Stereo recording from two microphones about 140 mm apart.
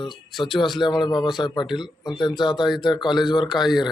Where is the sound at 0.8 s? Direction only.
35° left (ahead or behind).